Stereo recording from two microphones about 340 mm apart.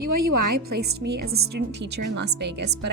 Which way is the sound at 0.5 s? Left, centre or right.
Right.